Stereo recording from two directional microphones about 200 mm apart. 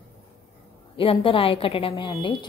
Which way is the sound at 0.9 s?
25° left (ahead or behind).